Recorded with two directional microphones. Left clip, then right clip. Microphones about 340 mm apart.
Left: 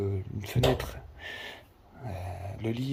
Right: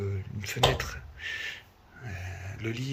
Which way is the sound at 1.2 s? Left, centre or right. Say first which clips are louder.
Right 5 dB; centre.